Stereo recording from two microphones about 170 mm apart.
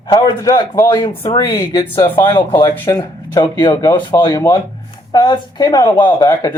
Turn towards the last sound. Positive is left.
turn(degrees=20)  # may be behind; listen again after turning